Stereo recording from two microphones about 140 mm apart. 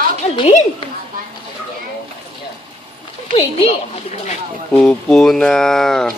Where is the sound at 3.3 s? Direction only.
45° left (ahead or behind).